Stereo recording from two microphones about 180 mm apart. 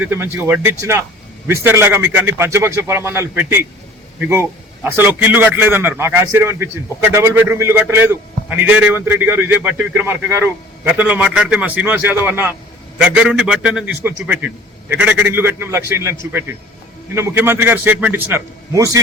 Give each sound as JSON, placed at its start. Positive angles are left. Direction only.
{"t": 0.0, "sound": "a man's voice", "side_deg": -10}